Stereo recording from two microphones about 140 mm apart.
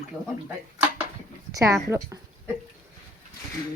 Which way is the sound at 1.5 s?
20° right (ahead or behind).